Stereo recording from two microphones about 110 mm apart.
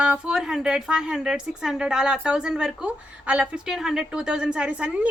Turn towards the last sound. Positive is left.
turn(degrees=-10)  # may be behind; listen again after turning